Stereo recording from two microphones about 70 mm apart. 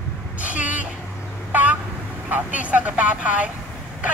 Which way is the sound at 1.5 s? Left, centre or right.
Right.